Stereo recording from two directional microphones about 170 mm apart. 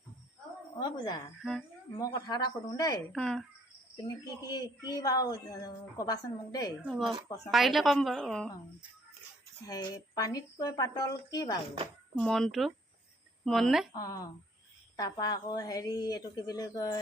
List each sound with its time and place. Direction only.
0.8 s a woman's voice: 25° left (ahead or behind)
3.1 s a woman's voice: 5° left (ahead or behind)
4.4 s a woman's voice: 20° left (ahead or behind)
6.8 s a woman's voice: centre (ahead or behind)
9.6 s a woman's voice: 20° left (ahead or behind)
12.1 s a woman's voice: 5° left (ahead or behind)
13.9 s a woman's voice: 20° left (ahead or behind)